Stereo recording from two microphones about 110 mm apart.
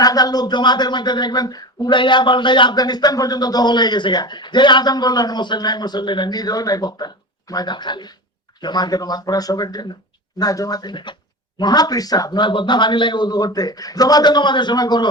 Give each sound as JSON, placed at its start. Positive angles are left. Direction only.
{"t": 0.0, "sound": "speech", "side_deg": 35}